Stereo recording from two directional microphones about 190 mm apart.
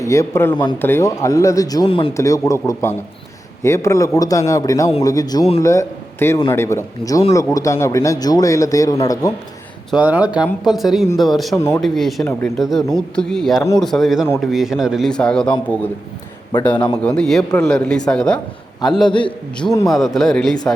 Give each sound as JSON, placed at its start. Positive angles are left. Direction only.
{"t": 0.0, "sound": "a man's voice", "side_deg": 15}
{"t": 0.8, "sound": "a man's voice", "side_deg": 10}
{"t": 2.1, "sound": "a man's voice", "side_deg": 15}
{"t": 5.6, "sound": "a man's voice", "side_deg": 15}
{"t": 9.9, "sound": "a man's voice", "side_deg": -10}
{"t": 11.5, "sound": "a man's voice", "side_deg": 15}
{"t": 11.8, "sound": "a man's voice", "side_deg": 0}
{"t": 12.2, "sound": "a man's voice", "side_deg": 15}
{"t": 12.5, "sound": "a man's voice", "side_deg": 0}
{"t": 17.0, "sound": "a man's voice", "side_deg": 5}
{"t": 19.0, "sound": "a man's voice", "side_deg": 25}
{"t": 19.9, "sound": "a man's voice", "side_deg": 0}